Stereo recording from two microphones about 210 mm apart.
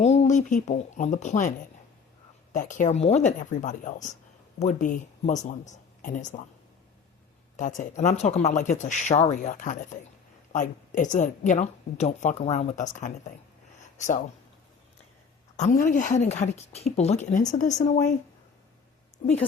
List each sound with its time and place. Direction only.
0.0 s speech: 30° left (ahead or behind)
7.5 s speech: 35° left (ahead or behind)
15.5 s speech: 35° left (ahead or behind)